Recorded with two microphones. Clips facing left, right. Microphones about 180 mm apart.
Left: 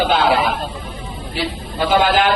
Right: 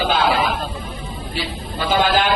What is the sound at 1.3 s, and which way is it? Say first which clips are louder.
Speech: left 5 dB; 55° left (ahead or behind).